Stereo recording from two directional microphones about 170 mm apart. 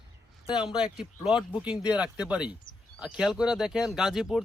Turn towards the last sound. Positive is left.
turn(degrees=0)  # may be behind; listen again after turning